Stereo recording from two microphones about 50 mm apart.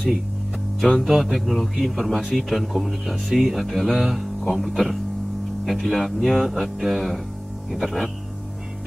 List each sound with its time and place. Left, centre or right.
1.0 s a man's voice: centre